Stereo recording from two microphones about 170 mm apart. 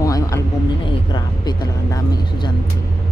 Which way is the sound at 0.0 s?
20° left (ahead or behind).